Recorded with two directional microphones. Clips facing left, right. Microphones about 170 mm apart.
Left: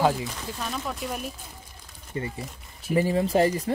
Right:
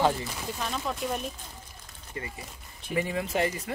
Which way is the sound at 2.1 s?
30° left (ahead or behind).